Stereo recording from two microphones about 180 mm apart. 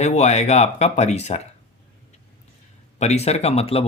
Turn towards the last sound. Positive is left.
turn(degrees=35)  # may be behind; listen again after turning